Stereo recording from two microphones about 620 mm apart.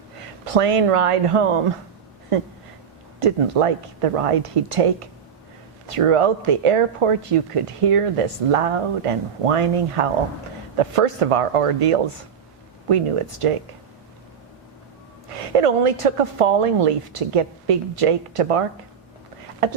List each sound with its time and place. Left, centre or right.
0.2 s speech: right
3.2 s a woman's voice: right
15.3 s a woman's voice: right
19.6 s a woman's voice: right